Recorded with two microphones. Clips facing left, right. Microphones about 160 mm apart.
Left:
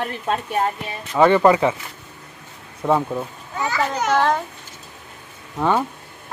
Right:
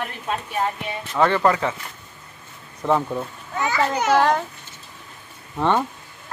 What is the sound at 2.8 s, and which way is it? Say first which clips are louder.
Speech: left 1 dB; 5° left (ahead or behind).